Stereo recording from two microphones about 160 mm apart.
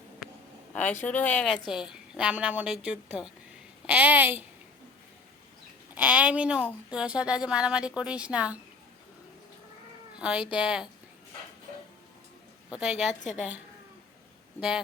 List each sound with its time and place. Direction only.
0.7 s a woman's voice: 10° left (ahead or behind)
1.6 s a woman's voice: 5° right (ahead or behind)
5.9 s a woman's voice: 10° right (ahead or behind)
10.2 s a woman's voice: 5° right (ahead or behind)
12.7 s a woman's voice: 5° right (ahead or behind)